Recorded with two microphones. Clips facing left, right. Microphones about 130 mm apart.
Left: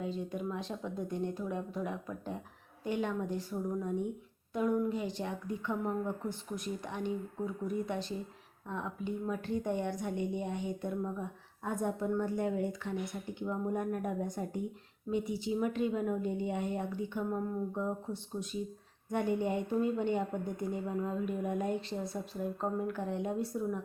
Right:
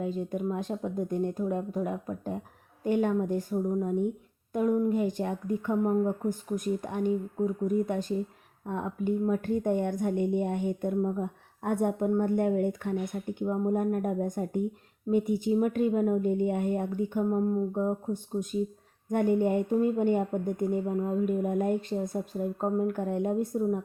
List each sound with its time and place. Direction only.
0.0 s speech: 50° right (ahead or behind)
11.2 s speech: 60° right (ahead or behind)
13.4 s speech: 40° right (ahead or behind)
17.2 s speech: 30° right (ahead or behind)
19.0 s speech: 50° right (ahead or behind)